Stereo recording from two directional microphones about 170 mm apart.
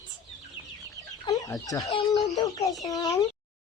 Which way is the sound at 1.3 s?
20° left (ahead or behind).